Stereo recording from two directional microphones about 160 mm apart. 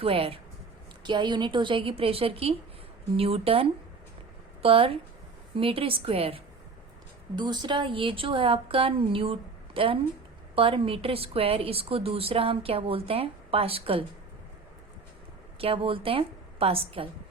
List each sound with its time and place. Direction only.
0.0 s a woman's voice: 35° right (ahead or behind)
15.5 s a woman's voice: 35° right (ahead or behind)